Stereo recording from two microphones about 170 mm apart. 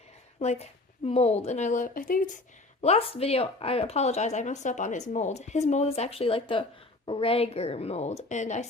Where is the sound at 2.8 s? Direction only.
35° left (ahead or behind).